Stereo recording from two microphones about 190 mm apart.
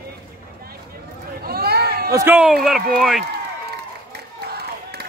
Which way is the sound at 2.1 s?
10° right (ahead or behind).